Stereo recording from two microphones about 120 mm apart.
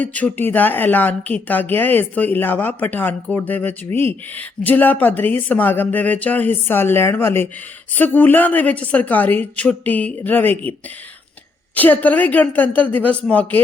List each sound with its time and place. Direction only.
0.0 s speech: 10° left (ahead or behind)